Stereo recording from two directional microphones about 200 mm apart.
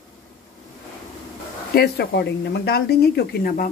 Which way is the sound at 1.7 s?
55° left (ahead or behind).